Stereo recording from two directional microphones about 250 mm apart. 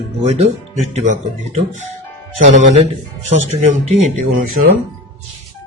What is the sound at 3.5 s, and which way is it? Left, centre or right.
Speech, right.